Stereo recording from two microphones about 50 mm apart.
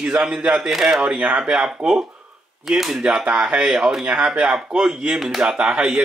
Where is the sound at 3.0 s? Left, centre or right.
Right.